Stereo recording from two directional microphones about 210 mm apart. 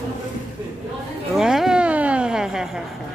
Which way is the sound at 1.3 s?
Centre (ahead or behind).